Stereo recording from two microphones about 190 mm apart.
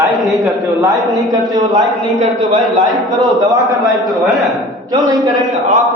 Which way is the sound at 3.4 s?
20° right (ahead or behind).